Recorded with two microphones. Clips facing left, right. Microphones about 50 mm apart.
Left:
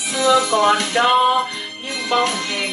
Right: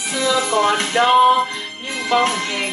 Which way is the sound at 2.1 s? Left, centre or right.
Centre.